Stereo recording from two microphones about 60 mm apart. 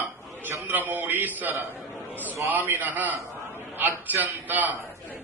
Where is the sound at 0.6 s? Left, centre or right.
Right.